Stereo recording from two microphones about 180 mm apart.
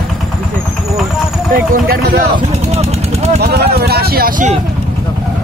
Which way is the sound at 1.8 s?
55° right (ahead or behind).